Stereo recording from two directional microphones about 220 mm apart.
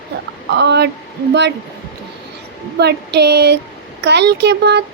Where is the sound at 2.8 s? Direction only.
50° right (ahead or behind).